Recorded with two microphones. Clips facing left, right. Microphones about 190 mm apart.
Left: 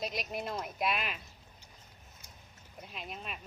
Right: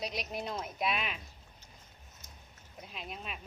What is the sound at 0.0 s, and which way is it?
Speech, centre (ahead or behind).